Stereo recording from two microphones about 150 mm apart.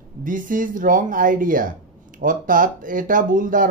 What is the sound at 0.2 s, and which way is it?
Speech, 65° right (ahead or behind).